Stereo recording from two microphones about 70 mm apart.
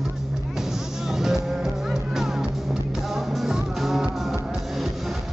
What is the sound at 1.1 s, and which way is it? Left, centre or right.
Music, centre.